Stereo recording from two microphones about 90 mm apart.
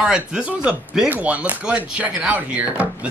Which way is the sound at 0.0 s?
10° right (ahead or behind).